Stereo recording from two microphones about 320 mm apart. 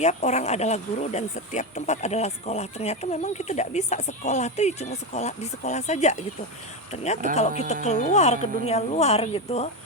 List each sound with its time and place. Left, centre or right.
0.0 s speech: left